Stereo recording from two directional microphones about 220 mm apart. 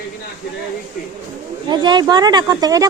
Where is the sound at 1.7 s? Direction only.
20° right (ahead or behind).